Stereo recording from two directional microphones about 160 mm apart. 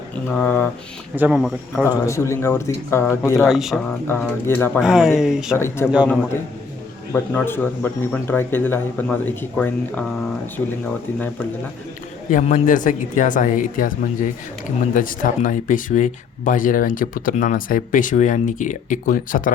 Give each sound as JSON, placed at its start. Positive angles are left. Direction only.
{"t": 0.3, "sound": "speech", "side_deg": 10}
{"t": 1.1, "sound": "speech", "side_deg": -10}
{"t": 2.0, "sound": "speech", "side_deg": 20}
{"t": 3.4, "sound": "speech", "side_deg": 0}
{"t": 4.0, "sound": "speech", "side_deg": 15}
{"t": 4.8, "sound": "speech", "side_deg": -5}
{"t": 5.5, "sound": "speech", "side_deg": 15}
{"t": 7.1, "sound": "speech", "side_deg": 15}
{"t": 12.3, "sound": "speech", "side_deg": 50}